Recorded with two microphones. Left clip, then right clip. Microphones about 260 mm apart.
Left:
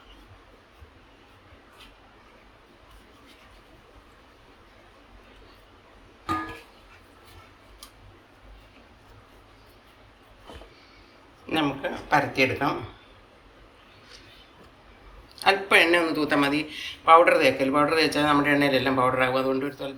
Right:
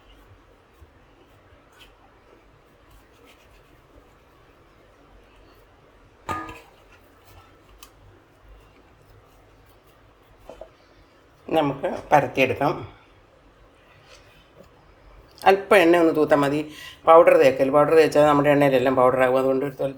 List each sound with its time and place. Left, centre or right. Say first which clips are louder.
11.4 s speech: right 4 dB; right
15.4 s speech: right 3 dB; right